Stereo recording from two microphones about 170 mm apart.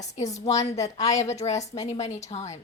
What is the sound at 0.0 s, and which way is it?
A woman's voice, 45° left (ahead or behind).